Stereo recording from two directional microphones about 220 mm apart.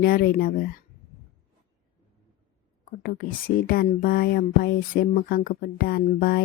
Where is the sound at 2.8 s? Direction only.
40° left (ahead or behind).